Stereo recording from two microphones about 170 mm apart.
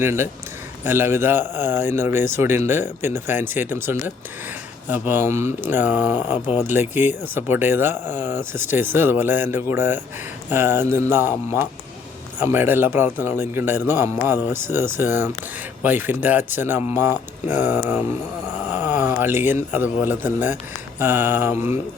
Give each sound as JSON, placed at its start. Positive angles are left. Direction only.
{"t": 0.0, "sound": "speech", "side_deg": -15}
{"t": 6.4, "sound": "speech", "side_deg": 40}
{"t": 6.7, "sound": "speech", "side_deg": -10}
{"t": 18.7, "sound": "a sound", "side_deg": -10}
{"t": 19.7, "sound": "speech", "side_deg": -10}